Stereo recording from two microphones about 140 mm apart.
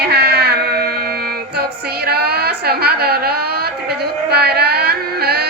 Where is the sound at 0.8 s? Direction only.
90° right.